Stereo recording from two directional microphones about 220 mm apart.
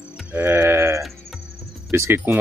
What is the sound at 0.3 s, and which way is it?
Sheep, 10° right (ahead or behind).